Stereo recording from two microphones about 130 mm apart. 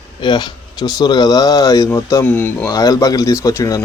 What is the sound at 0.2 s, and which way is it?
Speech, 35° left (ahead or behind).